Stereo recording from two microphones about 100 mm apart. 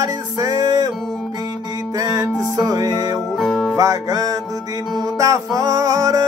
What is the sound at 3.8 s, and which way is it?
Music, 35° right (ahead or behind).